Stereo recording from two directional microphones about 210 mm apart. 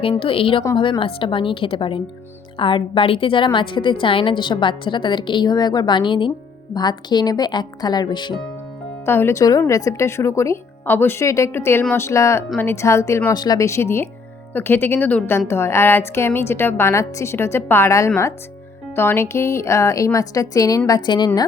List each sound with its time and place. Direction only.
0.0 s a woman's voice: 25° left (ahead or behind)